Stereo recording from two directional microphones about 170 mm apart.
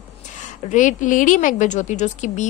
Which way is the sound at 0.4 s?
45° left (ahead or behind).